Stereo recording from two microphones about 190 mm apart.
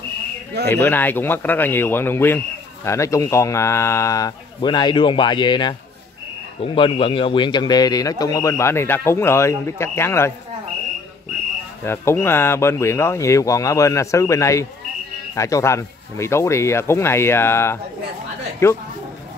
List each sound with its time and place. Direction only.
0.8 s a man's voice: 10° left (ahead or behind)
11.8 s a man's voice: 15° left (ahead or behind)